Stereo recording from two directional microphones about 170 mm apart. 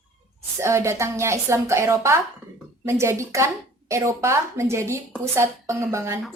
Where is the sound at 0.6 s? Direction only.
15° right (ahead or behind).